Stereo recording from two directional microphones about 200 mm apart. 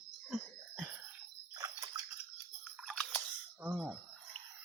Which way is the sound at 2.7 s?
Centre (ahead or behind).